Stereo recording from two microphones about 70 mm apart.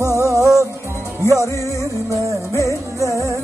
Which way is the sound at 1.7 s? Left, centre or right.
Right.